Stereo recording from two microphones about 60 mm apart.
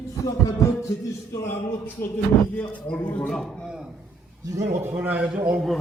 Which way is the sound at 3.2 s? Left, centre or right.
Centre.